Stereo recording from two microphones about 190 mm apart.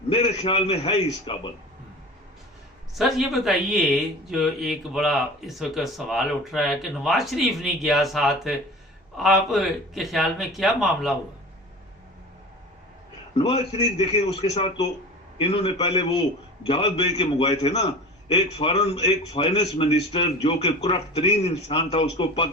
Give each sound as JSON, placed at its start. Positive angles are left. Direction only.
{"t": 0.1, "sound": "a man's voice", "side_deg": 30}
{"t": 2.9, "sound": "speech", "side_deg": 0}
{"t": 13.3, "sound": "a man's voice", "side_deg": 30}